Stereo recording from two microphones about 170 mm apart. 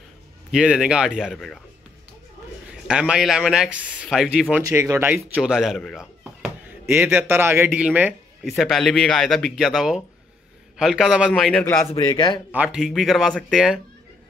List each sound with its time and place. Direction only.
0.5 s speech: 5° right (ahead or behind)
2.9 s speech: 5° right (ahead or behind)
11.9 s a man's voice: 30° left (ahead or behind)
12.4 s speech: 5° right (ahead or behind)